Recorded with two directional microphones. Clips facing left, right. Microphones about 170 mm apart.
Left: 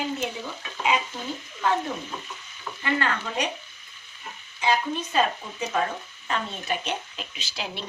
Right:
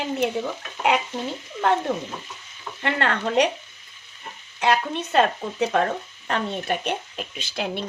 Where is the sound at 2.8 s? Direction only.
65° right (ahead or behind).